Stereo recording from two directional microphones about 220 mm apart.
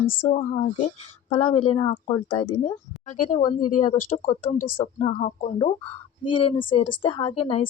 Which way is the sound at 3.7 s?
35° left (ahead or behind).